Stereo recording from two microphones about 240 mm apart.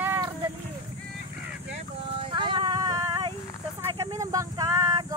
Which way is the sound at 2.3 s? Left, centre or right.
Centre.